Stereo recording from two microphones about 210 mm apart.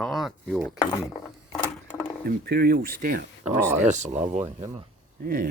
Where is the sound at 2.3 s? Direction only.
45° right (ahead or behind).